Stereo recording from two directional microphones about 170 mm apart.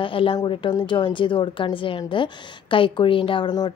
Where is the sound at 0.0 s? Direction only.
30° left (ahead or behind).